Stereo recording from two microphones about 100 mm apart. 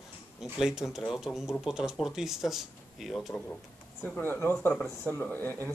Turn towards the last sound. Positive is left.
turn(degrees=20)  # may be behind; listen again after turning